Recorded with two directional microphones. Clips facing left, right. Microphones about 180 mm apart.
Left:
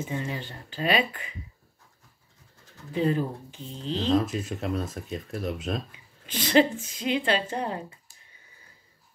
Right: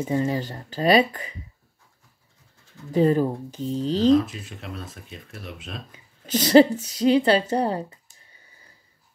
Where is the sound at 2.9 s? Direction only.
40° right (ahead or behind).